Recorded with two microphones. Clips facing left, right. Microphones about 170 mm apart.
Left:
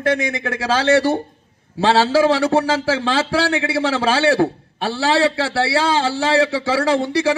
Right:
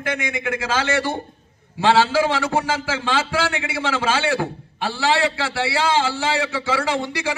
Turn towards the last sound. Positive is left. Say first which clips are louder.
# left 6 dB
turn(degrees=35)  # may be behind; listen again after turning